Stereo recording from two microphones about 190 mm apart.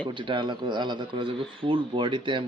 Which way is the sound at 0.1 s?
25° right (ahead or behind).